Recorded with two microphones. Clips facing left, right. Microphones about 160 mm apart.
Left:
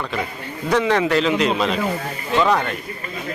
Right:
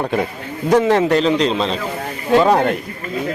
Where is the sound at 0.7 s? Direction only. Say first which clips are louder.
Right 4 dB; 40° right (ahead or behind).